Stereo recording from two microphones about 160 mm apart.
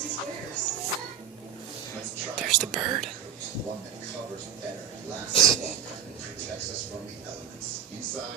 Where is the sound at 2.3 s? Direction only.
Centre (ahead or behind).